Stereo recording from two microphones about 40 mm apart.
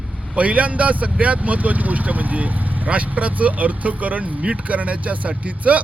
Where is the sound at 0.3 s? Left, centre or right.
Right.